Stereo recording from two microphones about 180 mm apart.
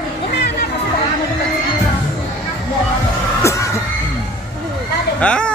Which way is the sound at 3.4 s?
15° left (ahead or behind).